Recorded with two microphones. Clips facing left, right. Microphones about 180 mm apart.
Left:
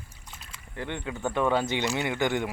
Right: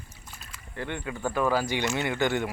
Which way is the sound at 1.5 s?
25° left (ahead or behind).